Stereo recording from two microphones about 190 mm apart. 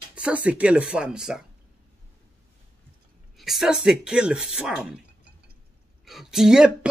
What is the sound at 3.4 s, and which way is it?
Speech, centre (ahead or behind).